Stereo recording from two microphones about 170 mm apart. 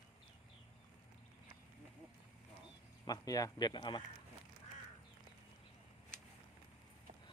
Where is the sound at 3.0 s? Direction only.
20° left (ahead or behind).